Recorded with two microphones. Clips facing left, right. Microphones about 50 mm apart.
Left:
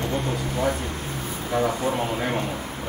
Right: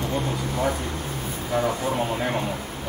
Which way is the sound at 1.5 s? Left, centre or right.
Centre.